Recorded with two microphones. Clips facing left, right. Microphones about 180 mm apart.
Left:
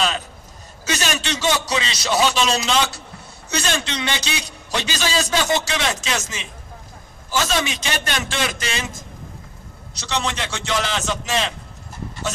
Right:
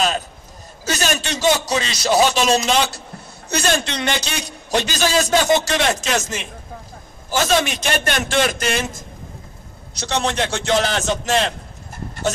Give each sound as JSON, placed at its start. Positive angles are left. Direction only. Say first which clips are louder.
{"t": 0.8, "sound": "a man's voice", "louder": "right 2 dB", "side_deg": -45}
{"t": 9.9, "sound": "a man's voice", "louder": "right 4 dB", "side_deg": -50}